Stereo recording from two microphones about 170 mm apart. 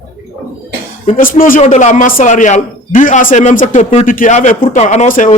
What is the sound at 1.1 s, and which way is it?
Speech, 55° left (ahead or behind).